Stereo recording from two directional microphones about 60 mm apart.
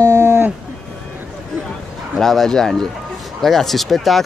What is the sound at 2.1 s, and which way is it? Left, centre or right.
Speech, centre.